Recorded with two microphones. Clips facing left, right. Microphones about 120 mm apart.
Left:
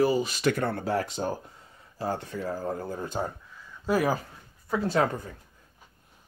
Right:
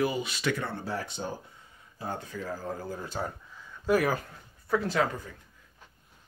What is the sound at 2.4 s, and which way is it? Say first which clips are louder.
Speech: left 4 dB; 35° left (ahead or behind).